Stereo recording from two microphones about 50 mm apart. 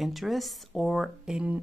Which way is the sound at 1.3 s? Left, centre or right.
Centre.